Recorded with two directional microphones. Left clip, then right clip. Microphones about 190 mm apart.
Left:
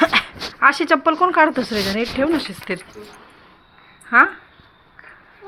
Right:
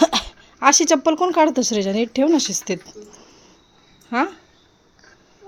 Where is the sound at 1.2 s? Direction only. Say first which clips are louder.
Left 2 dB; 30° right (ahead or behind).